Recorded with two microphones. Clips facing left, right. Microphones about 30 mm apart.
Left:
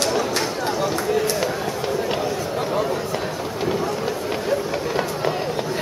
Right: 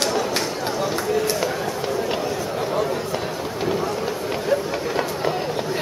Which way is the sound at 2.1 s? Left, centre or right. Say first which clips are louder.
Left 1 dB; centre.